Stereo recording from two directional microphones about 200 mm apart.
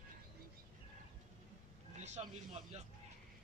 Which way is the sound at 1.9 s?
35° right (ahead or behind).